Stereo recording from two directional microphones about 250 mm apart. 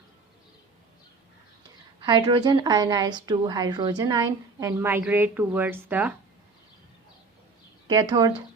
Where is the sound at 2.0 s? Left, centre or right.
Centre.